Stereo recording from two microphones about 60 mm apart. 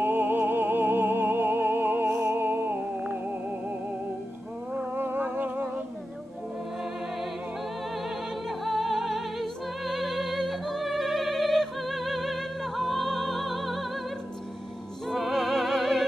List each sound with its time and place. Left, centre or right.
0.0 s music: right
4.9 s a sound: right
8.5 s music: centre
15.0 s music: centre